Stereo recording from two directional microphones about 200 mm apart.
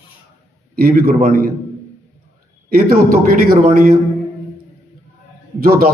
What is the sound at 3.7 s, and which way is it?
Speech, 45° right (ahead or behind).